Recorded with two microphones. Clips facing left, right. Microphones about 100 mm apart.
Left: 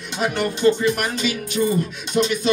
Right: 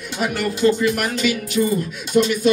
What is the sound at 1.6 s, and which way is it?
Music, 25° left (ahead or behind).